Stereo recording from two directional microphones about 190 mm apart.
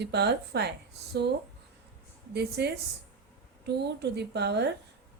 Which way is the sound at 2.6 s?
60° right (ahead or behind).